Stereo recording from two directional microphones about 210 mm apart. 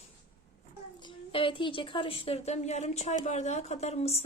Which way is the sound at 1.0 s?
25° left (ahead or behind).